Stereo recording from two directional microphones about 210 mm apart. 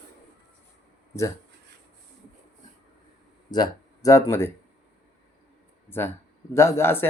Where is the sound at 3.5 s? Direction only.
15° left (ahead or behind).